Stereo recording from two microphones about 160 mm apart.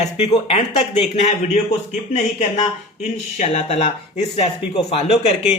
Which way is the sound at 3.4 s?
45° left (ahead or behind).